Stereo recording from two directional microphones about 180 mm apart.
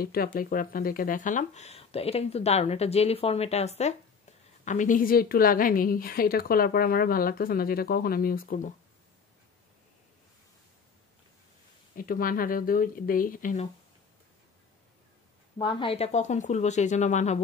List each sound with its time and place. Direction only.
0.0 s a woman's voice: 55° left (ahead or behind)
12.0 s speech: 50° left (ahead or behind)
15.5 s speech: 30° left (ahead or behind)